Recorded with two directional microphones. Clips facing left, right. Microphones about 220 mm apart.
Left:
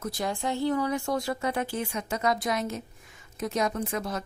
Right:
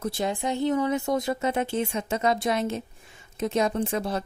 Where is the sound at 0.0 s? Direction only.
25° right (ahead or behind).